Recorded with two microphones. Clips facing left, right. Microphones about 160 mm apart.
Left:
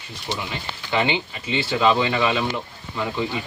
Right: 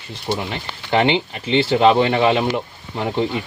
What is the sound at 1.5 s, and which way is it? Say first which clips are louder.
Speech: right 6 dB; 30° right (ahead or behind).